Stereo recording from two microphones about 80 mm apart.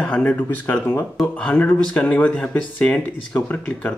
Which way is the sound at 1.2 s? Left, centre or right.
Centre.